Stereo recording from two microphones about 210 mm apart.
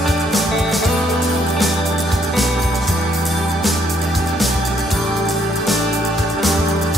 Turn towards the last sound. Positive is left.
turn(degrees=0)  # may be behind; listen again after turning